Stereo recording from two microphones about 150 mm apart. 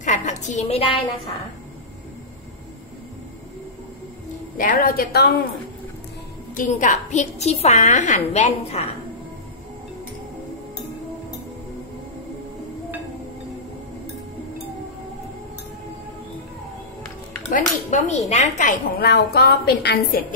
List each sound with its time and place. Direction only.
0.0 s a woman's voice: 55° left (ahead or behind)
4.6 s a woman's voice: 70° left (ahead or behind); by 5.3 s 85° left
6.5 s a woman's voice: 60° left (ahead or behind)
17.5 s speech: 60° left (ahead or behind); by 20.3 s 85° left